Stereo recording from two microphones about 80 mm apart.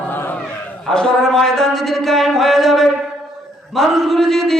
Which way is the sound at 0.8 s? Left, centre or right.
Centre.